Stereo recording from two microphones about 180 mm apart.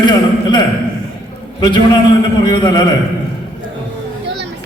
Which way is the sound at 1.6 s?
25° left (ahead or behind).